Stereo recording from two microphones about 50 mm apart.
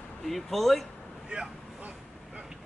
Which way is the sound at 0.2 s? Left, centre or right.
Centre.